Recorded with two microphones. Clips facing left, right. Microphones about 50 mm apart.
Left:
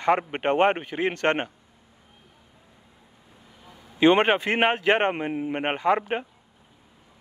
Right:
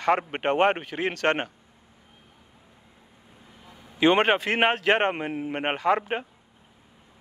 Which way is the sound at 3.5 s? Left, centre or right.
Centre.